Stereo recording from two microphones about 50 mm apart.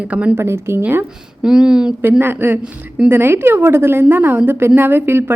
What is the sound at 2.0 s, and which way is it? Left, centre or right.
Speech, right.